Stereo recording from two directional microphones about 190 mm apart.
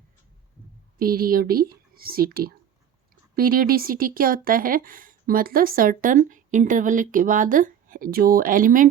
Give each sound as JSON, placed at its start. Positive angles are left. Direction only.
{"t": 0.9, "sound": "speech", "side_deg": -50}